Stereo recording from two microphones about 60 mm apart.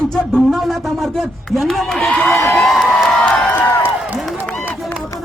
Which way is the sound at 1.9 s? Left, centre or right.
Centre.